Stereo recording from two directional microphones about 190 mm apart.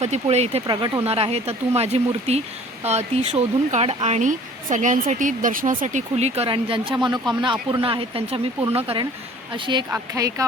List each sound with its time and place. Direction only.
0.0 s speech: 35° right (ahead or behind)
9.9 s speech: 15° right (ahead or behind)